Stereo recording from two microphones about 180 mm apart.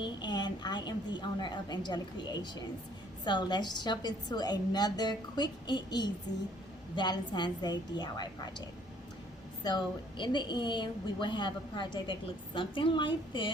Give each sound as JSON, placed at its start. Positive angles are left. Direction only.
{"t": 0.0, "sound": "a woman's voice", "side_deg": 25}
{"t": 9.6, "sound": "a woman's voice", "side_deg": 25}